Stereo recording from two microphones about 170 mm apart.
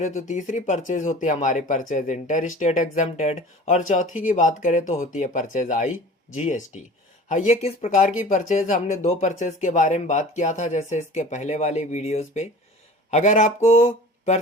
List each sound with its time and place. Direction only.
0.0 s speech: 45° left (ahead or behind)